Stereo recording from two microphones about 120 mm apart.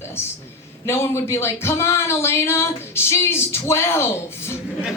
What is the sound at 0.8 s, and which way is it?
Speech, 20° left (ahead or behind).